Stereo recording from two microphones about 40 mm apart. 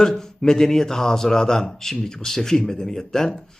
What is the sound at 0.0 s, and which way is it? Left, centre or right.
Speech, centre.